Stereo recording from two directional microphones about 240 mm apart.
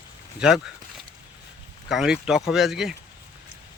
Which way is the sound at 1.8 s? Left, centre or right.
Centre.